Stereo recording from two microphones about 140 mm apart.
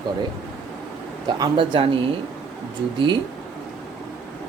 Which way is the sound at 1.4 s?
35° right (ahead or behind).